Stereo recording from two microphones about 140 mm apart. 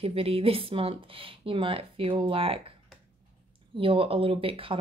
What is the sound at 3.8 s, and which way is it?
Speech, 40° right (ahead or behind).